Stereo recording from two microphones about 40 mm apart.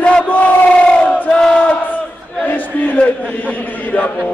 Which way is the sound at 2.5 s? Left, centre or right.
Left.